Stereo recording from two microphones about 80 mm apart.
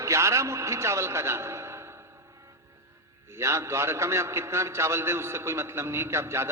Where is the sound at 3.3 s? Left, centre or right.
Right.